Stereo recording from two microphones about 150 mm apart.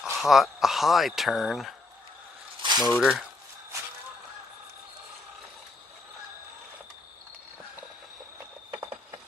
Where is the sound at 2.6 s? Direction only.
30° right (ahead or behind).